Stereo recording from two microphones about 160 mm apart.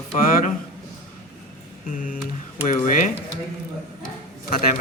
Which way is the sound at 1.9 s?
55° left (ahead or behind).